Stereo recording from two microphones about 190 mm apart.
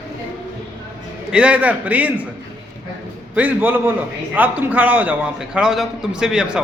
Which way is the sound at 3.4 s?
10° right (ahead or behind).